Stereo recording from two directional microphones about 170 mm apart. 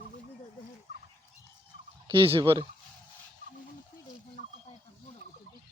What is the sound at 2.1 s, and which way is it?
Fowl, 30° right (ahead or behind).